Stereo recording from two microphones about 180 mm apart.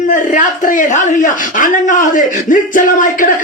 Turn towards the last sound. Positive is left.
turn(degrees=45)  # may be behind; listen again after turning